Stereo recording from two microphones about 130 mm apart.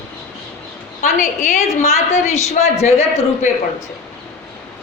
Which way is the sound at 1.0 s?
70° left (ahead or behind).